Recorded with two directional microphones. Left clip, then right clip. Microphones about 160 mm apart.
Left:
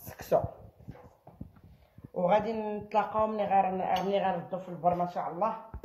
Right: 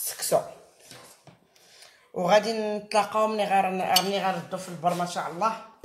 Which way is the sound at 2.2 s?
30° right (ahead or behind).